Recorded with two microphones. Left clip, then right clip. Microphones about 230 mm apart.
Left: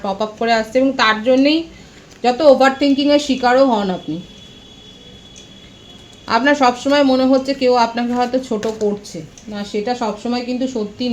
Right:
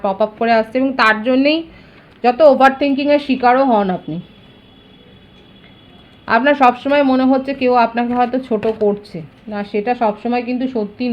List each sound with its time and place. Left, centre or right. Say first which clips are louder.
0.0 s speech: right 3 dB; right
6.2 s speech: right 2 dB; right